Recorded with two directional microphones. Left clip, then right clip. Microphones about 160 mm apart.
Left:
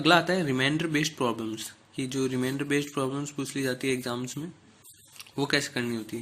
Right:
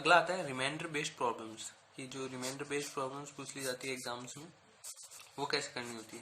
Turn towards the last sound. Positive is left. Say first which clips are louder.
# left 10 dB
turn(degrees=20)  # may be behind; listen again after turning